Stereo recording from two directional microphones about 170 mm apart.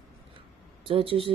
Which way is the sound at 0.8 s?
30° right (ahead or behind).